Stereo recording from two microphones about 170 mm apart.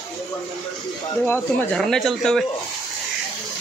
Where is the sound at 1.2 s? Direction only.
10° left (ahead or behind).